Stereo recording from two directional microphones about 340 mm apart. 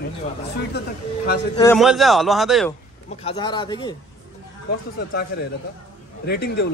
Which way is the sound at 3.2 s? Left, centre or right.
Centre.